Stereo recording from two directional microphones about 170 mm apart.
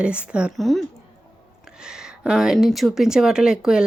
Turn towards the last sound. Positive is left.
turn(degrees=-5)  # may be behind; listen again after turning